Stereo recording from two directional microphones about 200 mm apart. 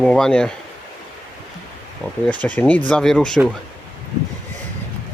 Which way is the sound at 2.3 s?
5° left (ahead or behind).